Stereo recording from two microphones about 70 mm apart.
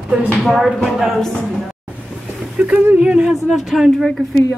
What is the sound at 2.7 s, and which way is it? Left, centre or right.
Speech, right.